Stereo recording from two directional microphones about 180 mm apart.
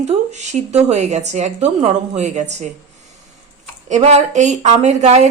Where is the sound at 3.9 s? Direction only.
40° right (ahead or behind).